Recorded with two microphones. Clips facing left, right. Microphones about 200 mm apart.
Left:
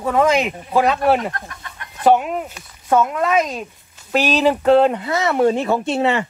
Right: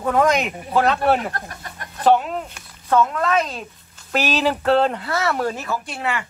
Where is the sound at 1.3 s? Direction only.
35° right (ahead or behind).